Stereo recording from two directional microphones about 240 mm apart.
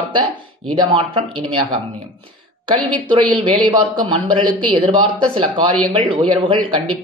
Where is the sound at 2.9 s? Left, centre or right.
Centre.